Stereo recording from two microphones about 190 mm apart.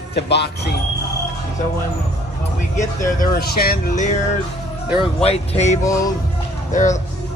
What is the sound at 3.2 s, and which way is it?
Speech, 55° left (ahead or behind).